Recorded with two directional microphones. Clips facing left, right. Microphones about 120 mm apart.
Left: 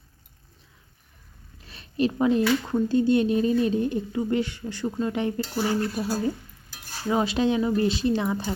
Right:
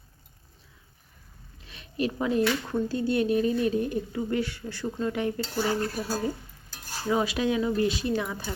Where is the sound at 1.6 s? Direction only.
35° left (ahead or behind).